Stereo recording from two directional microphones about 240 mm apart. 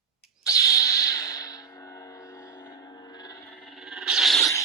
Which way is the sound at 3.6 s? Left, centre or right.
Centre.